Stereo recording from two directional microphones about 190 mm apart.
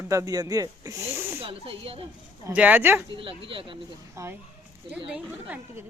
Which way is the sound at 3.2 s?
25° right (ahead or behind).